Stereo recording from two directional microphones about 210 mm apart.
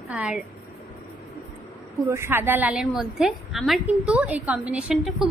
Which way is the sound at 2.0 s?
15° right (ahead or behind).